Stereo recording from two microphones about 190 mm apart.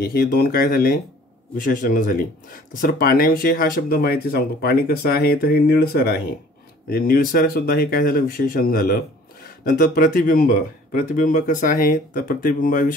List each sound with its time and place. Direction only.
0.0 s speech: 55° left (ahead or behind)